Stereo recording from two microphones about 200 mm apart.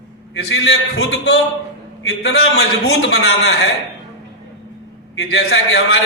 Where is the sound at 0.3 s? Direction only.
60° left (ahead or behind).